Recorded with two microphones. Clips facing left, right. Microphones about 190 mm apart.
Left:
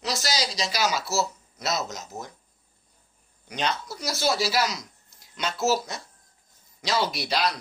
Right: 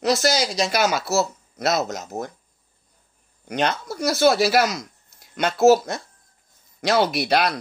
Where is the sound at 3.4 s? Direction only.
55° right (ahead or behind).